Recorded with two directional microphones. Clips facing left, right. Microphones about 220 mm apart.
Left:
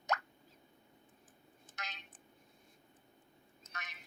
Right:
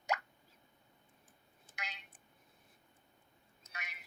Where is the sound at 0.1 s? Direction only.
10° right (ahead or behind).